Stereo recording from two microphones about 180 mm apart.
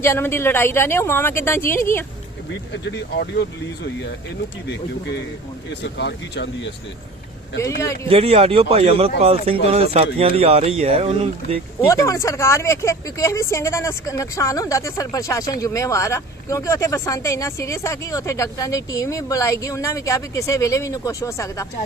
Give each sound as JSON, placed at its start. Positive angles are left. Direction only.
{"t": 0.0, "sound": "speech", "side_deg": 15}
{"t": 2.5, "sound": "speech", "side_deg": 80}
{"t": 4.7, "sound": "speech", "side_deg": 70}
{"t": 8.0, "sound": "speech", "side_deg": -30}
{"t": 11.9, "sound": "speech", "side_deg": 15}